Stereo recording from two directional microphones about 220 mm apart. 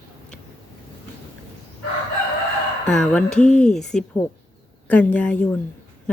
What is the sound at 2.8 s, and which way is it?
A woman's voice, 5° left (ahead or behind).